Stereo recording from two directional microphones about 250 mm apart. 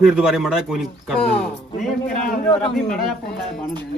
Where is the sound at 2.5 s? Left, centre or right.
Left.